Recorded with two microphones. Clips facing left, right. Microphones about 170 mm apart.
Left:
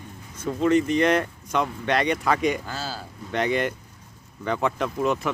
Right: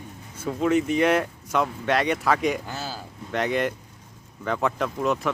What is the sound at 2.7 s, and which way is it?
Speech, 15° right (ahead or behind).